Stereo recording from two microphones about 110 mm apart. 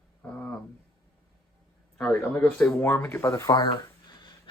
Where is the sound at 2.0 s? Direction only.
15° left (ahead or behind).